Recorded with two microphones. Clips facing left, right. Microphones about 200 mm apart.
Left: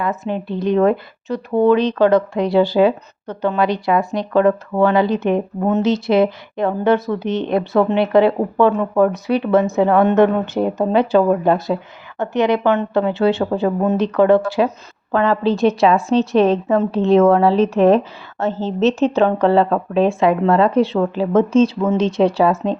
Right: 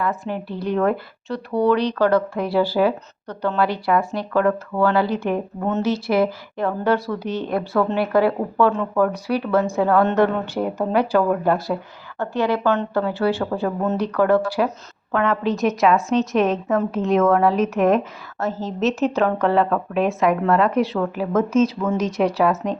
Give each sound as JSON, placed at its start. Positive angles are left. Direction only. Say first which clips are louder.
{"t": 0.0, "sound": "speech", "louder": "left 3 dB", "side_deg": 20}